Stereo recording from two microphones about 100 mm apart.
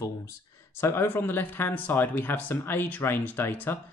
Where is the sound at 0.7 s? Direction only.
25° left (ahead or behind).